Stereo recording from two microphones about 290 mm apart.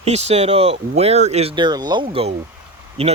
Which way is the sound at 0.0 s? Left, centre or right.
Right.